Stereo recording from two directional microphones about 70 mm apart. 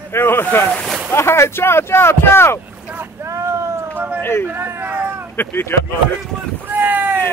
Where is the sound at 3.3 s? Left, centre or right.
Right.